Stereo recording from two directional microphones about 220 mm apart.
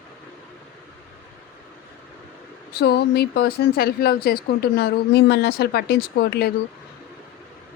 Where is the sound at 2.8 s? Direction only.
45° left (ahead or behind).